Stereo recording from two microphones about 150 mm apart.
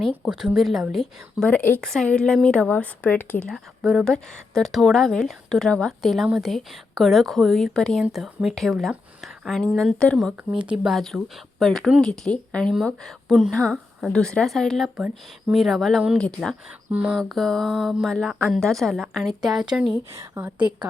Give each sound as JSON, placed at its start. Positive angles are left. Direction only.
{"t": 0.0, "sound": "speech", "side_deg": 0}
{"t": 1.5, "sound": "speech", "side_deg": 10}
{"t": 15.0, "sound": "speech", "side_deg": -10}
{"t": 15.6, "sound": "speech", "side_deg": 0}
{"t": 20.1, "sound": "speech", "side_deg": -20}